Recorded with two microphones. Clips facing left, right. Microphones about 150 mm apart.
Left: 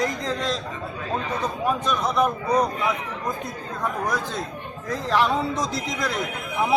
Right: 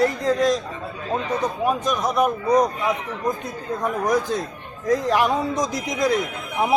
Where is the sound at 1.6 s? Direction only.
10° right (ahead or behind).